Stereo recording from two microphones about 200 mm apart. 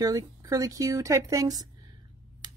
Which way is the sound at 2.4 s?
20° right (ahead or behind).